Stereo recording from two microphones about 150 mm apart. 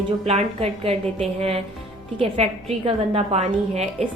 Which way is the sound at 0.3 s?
40° right (ahead or behind).